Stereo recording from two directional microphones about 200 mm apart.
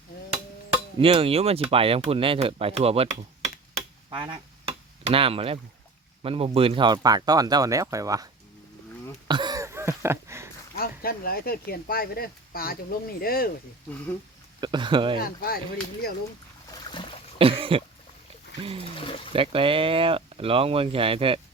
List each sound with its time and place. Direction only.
0.9 s speech: 30° right (ahead or behind)
3.8 s a sound: 25° right (ahead or behind)
5.0 s speech: 30° right (ahead or behind)
9.2 s a sound: 20° right (ahead or behind)
10.8 s speech: 50° left (ahead or behind)
14.6 s speech: 25° right (ahead or behind)
15.2 s speech: 50° left (ahead or behind)
16.9 s a sound: 25° left (ahead or behind)
17.3 s cough: 25° right (ahead or behind)
18.6 s speech: 30° right (ahead or behind)
18.9 s speech: 25° left (ahead or behind)
19.3 s speech: 25° right (ahead or behind)